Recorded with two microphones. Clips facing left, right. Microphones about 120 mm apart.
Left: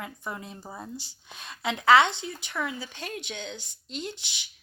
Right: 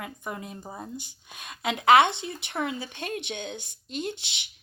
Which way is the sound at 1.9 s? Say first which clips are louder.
Right 1 dB; 60° right (ahead or behind).